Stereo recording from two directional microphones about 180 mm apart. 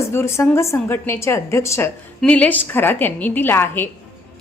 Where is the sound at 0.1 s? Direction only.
15° left (ahead or behind).